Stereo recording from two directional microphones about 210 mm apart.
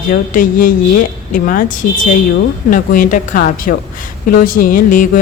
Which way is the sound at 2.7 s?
40° left (ahead or behind).